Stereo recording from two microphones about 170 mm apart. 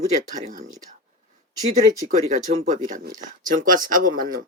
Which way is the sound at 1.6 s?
40° right (ahead or behind).